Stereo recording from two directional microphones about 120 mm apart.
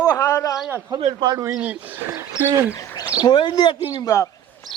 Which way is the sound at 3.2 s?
40° left (ahead or behind).